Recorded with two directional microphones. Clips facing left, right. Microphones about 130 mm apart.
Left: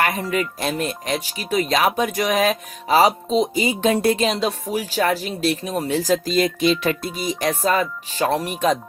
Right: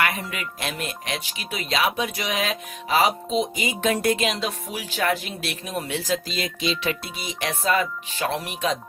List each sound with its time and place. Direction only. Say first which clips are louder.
0.0 s speech: left 5 dB; 40° left (ahead or behind)